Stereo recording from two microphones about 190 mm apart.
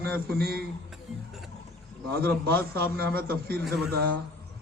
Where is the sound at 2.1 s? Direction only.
55° right (ahead or behind).